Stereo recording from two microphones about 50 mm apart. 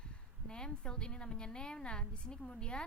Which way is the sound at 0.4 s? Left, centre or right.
Centre.